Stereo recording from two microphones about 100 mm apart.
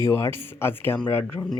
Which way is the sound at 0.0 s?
25° left (ahead or behind).